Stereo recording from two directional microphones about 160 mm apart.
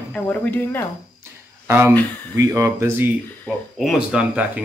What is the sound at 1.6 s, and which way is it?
Speech, 15° right (ahead or behind).